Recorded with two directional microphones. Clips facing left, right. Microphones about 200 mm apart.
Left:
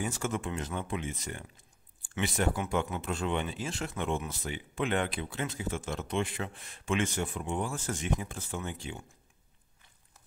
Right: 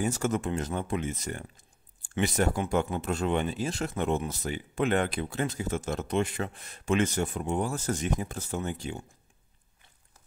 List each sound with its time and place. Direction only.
0.0 s speech: 40° right (ahead or behind)